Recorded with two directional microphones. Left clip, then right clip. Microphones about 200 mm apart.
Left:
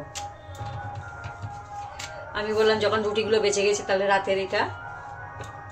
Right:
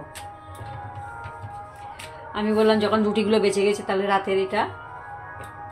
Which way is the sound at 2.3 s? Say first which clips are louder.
Right 2 dB; 30° right (ahead or behind).